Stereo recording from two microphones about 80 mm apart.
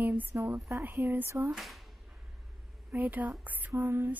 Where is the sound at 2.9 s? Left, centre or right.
Right.